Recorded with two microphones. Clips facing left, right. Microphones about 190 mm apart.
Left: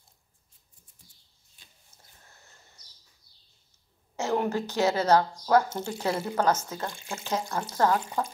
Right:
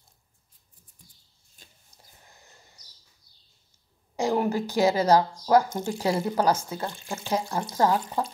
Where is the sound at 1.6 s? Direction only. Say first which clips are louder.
Right 5 dB; 45° right (ahead or behind).